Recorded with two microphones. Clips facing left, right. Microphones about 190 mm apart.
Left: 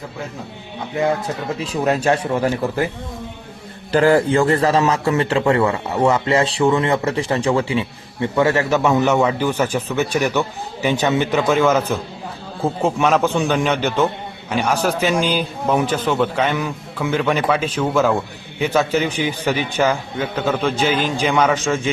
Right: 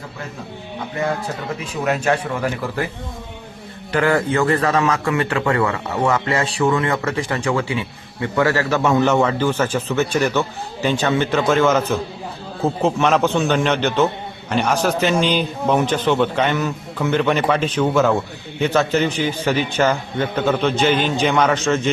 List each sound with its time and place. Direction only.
1.5 s a man's voice: 30° left (ahead or behind)
3.9 s a man's voice: 30° left (ahead or behind); by 21.9 s 10° left (ahead or behind)